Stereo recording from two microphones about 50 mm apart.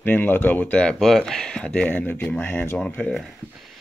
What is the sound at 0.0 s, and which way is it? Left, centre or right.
Speech, left.